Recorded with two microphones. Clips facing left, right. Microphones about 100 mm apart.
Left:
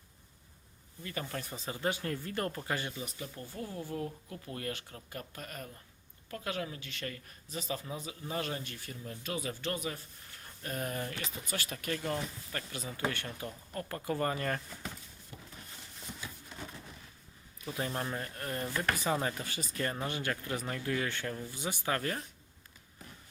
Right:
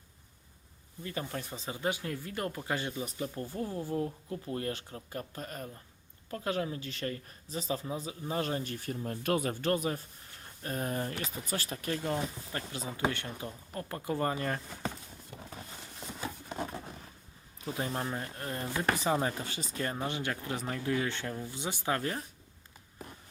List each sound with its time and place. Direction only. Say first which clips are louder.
1.0 s speech: right 2 dB; 20° right (ahead or behind)
3.0 s speech: right 6 dB; 35° right (ahead or behind)
3.6 s speech: right 4 dB; 30° right (ahead or behind)
10.6 s speech: right 3 dB; 30° right (ahead or behind); by 14.6 s 15° right (ahead or behind)
16.6 s a sound: right 7 dB; 45° right (ahead or behind)
17.8 s speech: even; 10° right (ahead or behind)